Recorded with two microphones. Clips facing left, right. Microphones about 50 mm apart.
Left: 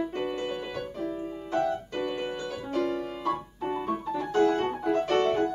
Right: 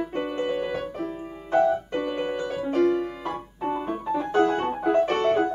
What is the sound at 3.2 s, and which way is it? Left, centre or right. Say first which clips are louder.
Keyboard: even; centre.